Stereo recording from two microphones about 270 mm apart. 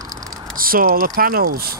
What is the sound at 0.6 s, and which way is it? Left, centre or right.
Speech, right.